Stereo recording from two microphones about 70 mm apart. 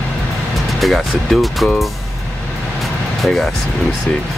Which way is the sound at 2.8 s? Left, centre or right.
Centre.